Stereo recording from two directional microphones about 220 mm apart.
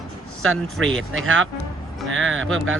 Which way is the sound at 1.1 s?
65° right (ahead or behind).